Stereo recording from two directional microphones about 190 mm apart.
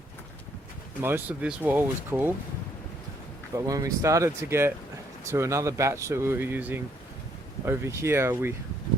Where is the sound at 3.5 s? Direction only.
20° right (ahead or behind).